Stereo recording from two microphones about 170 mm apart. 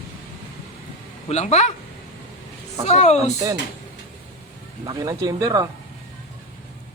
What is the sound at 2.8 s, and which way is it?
Speech, 40° left (ahead or behind).